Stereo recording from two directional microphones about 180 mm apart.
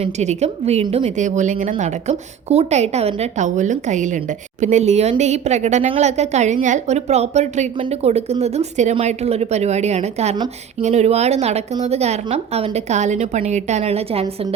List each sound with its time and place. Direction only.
0.0 s a woman's voice: 40° right (ahead or behind)